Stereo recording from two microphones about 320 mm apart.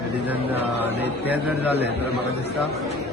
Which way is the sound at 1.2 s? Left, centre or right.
Centre.